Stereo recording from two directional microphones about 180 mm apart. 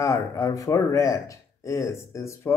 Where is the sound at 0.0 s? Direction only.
20° left (ahead or behind).